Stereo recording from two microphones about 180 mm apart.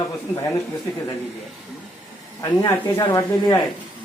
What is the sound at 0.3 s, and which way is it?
Speech, 15° left (ahead or behind).